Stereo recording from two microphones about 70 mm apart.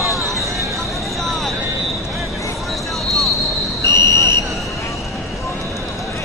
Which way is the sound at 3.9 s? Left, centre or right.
Left.